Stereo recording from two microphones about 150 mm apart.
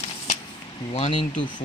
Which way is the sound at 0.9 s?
45° left (ahead or behind).